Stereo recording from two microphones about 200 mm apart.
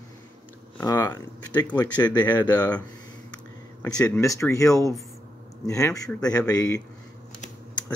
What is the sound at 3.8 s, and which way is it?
Speech, 10° left (ahead or behind).